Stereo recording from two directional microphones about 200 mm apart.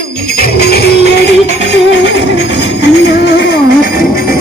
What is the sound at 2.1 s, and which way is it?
Music, 60° left (ahead or behind).